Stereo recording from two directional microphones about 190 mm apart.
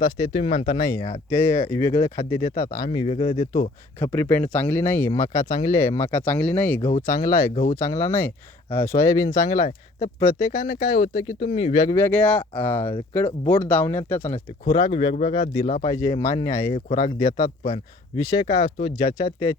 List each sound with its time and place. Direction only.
0.0 s speech: 25° left (ahead or behind)
3.5 s speech: 15° left (ahead or behind)
7.5 s speech: 40° left (ahead or behind)
7.8 s speech: 15° left (ahead or behind)
10.5 s speech: 45° left (ahead or behind)
10.9 s speech: 25° left (ahead or behind)
11.8 s speech: 15° left (ahead or behind)
14.7 s speech: 25° left (ahead or behind)